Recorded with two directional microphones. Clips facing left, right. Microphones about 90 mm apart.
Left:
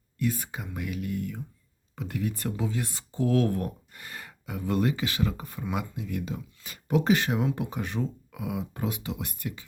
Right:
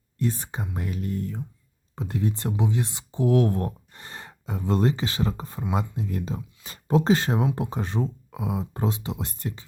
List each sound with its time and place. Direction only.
0.2 s speech: 30° right (ahead or behind)